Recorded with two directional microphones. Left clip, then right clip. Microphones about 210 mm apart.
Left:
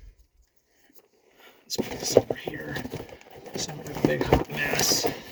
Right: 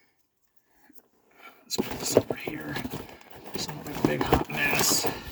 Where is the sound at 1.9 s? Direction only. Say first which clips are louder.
Left 3 dB; 25° right (ahead or behind).